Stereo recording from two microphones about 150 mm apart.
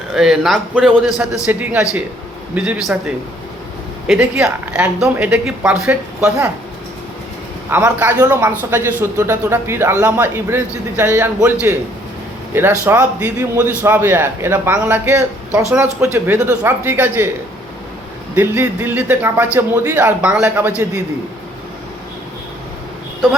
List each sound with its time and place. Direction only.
0.1 s speech: centre (ahead or behind)
1.5 s speech: 10° right (ahead or behind)
4.0 s speech: 10° right (ahead or behind)
7.7 s speech: 10° right (ahead or behind)
12.8 s speech: 15° right (ahead or behind)
18.3 s speech: 15° right (ahead or behind)